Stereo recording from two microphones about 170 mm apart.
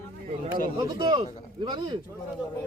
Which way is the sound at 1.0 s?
25° right (ahead or behind).